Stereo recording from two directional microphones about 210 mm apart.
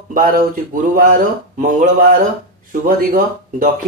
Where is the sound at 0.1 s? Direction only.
40° right (ahead or behind).